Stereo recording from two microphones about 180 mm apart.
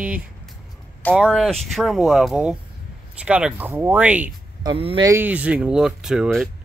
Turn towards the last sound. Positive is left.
turn(degrees=-5)  # may be behind; listen again after turning